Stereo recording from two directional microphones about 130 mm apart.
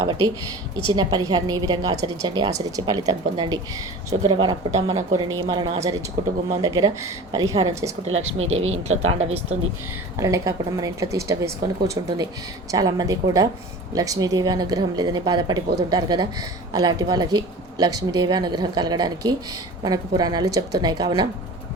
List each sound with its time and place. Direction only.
0.9 s a woman's voice: 35° right (ahead or behind)
8.1 s speech: 55° right (ahead or behind)
10.2 s a woman's voice: 25° right (ahead or behind)